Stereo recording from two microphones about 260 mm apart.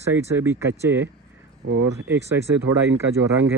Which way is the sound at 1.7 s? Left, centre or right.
Right.